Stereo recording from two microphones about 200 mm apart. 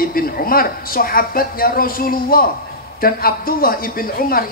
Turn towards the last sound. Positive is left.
turn(degrees=45)  # may be behind; listen again after turning